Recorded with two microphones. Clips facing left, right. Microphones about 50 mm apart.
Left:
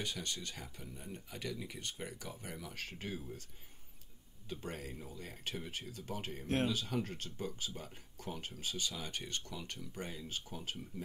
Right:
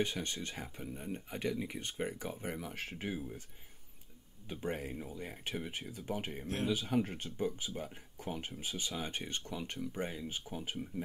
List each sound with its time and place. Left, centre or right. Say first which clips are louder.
0.0 s speech: right 5 dB; right
4.5 s speech: right 5 dB; right
6.4 s speech: left 6 dB; left
6.7 s speech: right 5 dB; centre